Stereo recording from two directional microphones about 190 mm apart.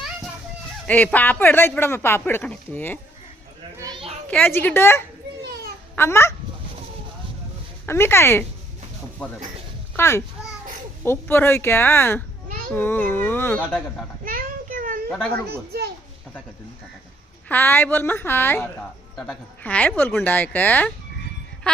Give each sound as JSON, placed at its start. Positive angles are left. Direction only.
{"t": 0.9, "sound": "speech", "side_deg": 10}
{"t": 3.8, "sound": "children playing", "side_deg": -25}
{"t": 4.3, "sound": "speech", "side_deg": 10}
{"t": 5.4, "sound": "babbling", "side_deg": -60}
{"t": 6.0, "sound": "speech", "side_deg": 15}
{"t": 7.9, "sound": "speech", "side_deg": 10}
{"t": 9.9, "sound": "a child's voice", "side_deg": 15}
{"t": 14.3, "sound": "a sound", "side_deg": -50}
{"t": 17.5, "sound": "speech", "side_deg": 10}